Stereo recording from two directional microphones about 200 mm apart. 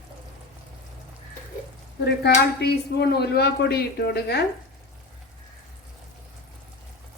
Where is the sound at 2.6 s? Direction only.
55° left (ahead or behind).